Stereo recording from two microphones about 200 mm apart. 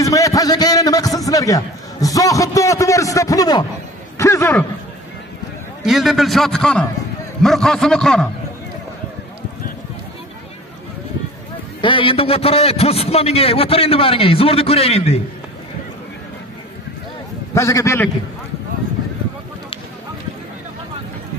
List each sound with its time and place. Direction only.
0.0 s a man's voice: 15° left (ahead or behind)
5.8 s a man's voice: centre (ahead or behind)
11.8 s a man's voice: 25° left (ahead or behind)
17.6 s a man's voice: 15° left (ahead or behind)